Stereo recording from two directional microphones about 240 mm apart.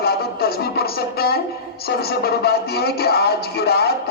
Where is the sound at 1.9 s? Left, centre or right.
Left.